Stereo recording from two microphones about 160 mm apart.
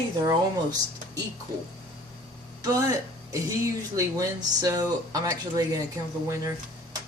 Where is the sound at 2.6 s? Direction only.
20° right (ahead or behind).